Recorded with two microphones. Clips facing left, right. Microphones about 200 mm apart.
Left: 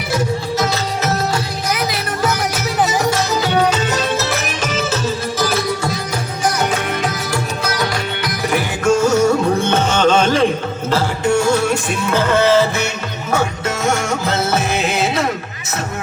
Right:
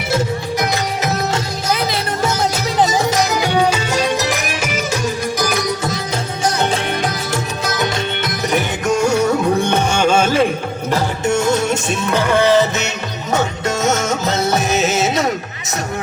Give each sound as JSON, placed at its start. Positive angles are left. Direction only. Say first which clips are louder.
{"t": 0.6, "sound": "music", "louder": "even", "side_deg": -15}
{"t": 1.7, "sound": "music", "louder": "right 3 dB", "side_deg": -25}
{"t": 7.6, "sound": "music", "louder": "right 1 dB", "side_deg": -20}
{"t": 10.9, "sound": "music", "louder": "left 1 dB", "side_deg": -20}